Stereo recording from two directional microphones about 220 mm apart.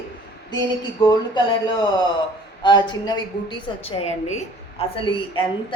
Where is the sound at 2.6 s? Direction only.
20° left (ahead or behind).